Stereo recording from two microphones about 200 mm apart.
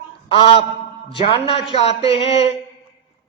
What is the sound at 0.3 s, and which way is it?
A man's voice, 25° left (ahead or behind).